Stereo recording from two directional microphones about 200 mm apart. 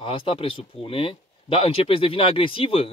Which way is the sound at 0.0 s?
25° left (ahead or behind).